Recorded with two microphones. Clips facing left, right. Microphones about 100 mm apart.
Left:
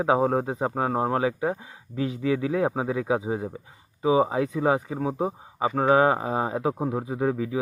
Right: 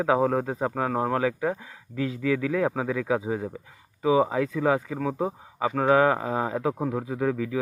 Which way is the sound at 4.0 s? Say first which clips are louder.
Even; 20° left (ahead or behind).